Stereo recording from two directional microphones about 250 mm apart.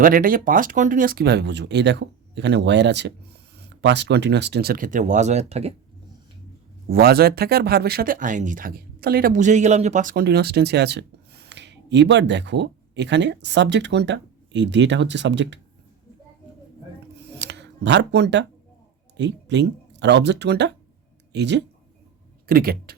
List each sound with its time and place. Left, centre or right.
0.0 s speech: right
6.9 s speech: right
17.2 s a sound: right
19.1 s speech: right